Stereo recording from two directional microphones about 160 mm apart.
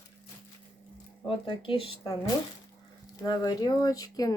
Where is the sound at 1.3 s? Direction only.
30° left (ahead or behind).